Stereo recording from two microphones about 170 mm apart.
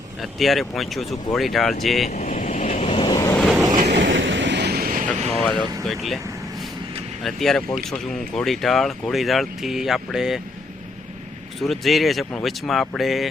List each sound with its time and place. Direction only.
0.2 s speech: centre (ahead or behind)
2.0 s vehicle: 45° left (ahead or behind)
2.9 s vehicle: 25° left (ahead or behind)
3.3 s train: centre (ahead or behind)
3.8 s vehicle: 90° right; by 5.0 s 60° right (ahead or behind)
5.3 s a sound: 5° left (ahead or behind)
5.8 s speech: centre (ahead or behind)
7.2 s speech: centre (ahead or behind)
11.6 s speech: centre (ahead or behind)